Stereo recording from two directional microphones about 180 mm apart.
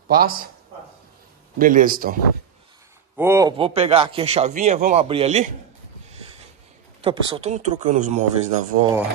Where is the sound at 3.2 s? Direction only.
15° right (ahead or behind).